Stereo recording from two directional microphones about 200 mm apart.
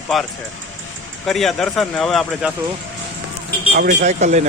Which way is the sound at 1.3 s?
Centre (ahead or behind).